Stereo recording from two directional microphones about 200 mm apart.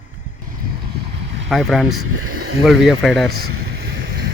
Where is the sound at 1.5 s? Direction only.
Centre (ahead or behind).